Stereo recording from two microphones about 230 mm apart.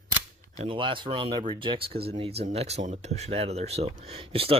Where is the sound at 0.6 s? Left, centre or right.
Right.